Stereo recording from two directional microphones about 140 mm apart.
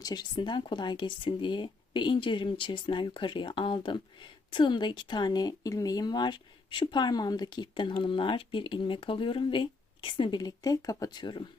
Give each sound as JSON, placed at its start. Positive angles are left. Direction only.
{"t": 0.0, "sound": "speech", "side_deg": 30}